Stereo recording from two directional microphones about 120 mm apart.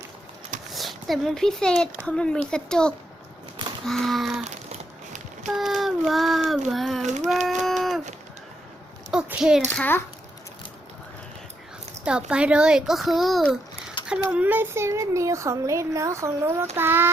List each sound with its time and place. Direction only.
0.7 s a child's voice: centre (ahead or behind)
4.4 s a sound: 75° right (ahead or behind)
5.5 s a child's voice: centre (ahead or behind)
7.0 s a sound: 75° right (ahead or behind)
7.3 s speech: centre (ahead or behind)
7.6 s a sound: centre (ahead or behind)
9.0 s a child's voice: 5° right (ahead or behind)
9.6 s speech: 15° left (ahead or behind)
12.0 s a child's voice: 10° right (ahead or behind)
14.1 s speech: 10° right (ahead or behind)